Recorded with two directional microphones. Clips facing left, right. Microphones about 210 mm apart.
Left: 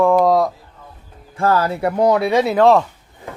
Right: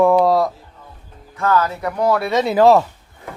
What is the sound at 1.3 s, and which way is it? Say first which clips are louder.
Speech: left 1 dB; 30° left (ahead or behind).